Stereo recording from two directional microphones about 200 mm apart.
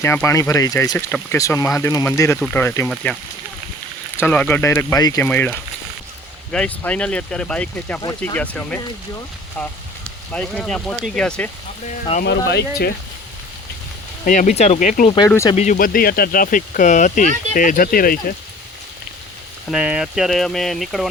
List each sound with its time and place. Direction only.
0.0 s speech: 10° left (ahead or behind)
4.2 s speech: 5° left (ahead or behind)
12.5 s speech: 55° left (ahead or behind)
14.3 s speech: 35° left (ahead or behind)
19.7 s speech: 5° right (ahead or behind)